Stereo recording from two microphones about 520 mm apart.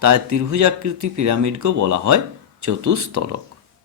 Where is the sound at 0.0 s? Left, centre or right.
Right.